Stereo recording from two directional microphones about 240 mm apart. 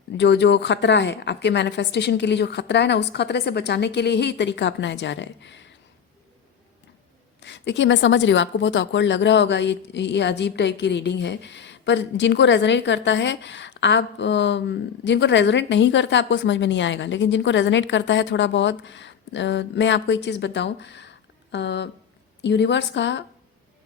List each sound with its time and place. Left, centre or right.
0.2 s a woman's voice: left
7.4 s a woman's voice: left